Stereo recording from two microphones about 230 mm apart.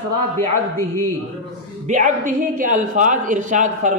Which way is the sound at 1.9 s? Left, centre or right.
Right.